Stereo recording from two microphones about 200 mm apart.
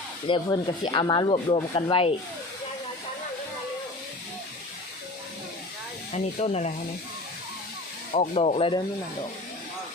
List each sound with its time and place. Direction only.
0.3 s speech: 25° left (ahead or behind)
6.1 s speech: 35° left (ahead or behind)
8.1 s speech: 35° left (ahead or behind)